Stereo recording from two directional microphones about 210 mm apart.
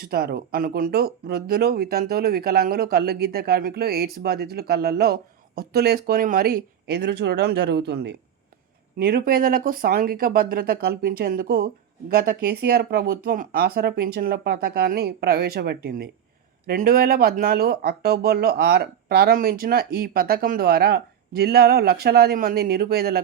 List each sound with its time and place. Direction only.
0.0 s speech: 45° right (ahead or behind)